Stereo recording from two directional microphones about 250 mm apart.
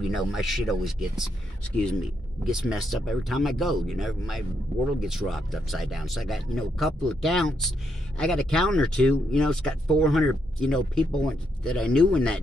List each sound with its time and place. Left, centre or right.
0.1 s speech: centre
2.4 s speech: centre